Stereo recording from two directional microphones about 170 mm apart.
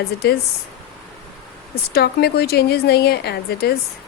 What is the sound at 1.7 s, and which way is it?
A woman's voice, 70° left (ahead or behind).